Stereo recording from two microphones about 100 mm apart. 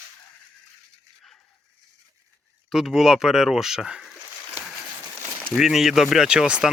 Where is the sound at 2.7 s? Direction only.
5° right (ahead or behind).